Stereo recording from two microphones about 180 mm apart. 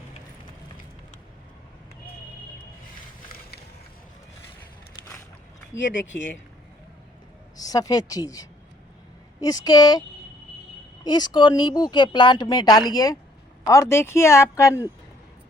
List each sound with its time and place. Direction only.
5.7 s speech: 90° left
7.5 s a woman's voice: 20° left (ahead or behind)
11.0 s speech: 25° left (ahead or behind)